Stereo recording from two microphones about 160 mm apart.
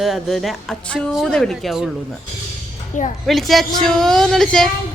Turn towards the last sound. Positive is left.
turn(degrees=0)  # may be behind; listen again after turning